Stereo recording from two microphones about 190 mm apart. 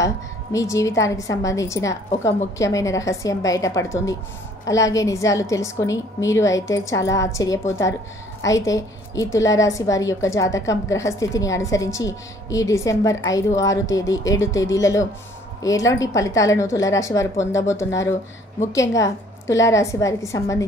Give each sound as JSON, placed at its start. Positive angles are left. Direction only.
{"t": 0.0, "sound": "a woman's voice", "side_deg": 15}